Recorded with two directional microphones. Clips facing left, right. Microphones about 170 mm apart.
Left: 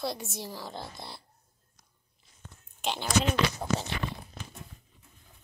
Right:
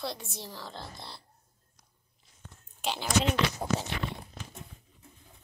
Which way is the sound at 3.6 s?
10° right (ahead or behind).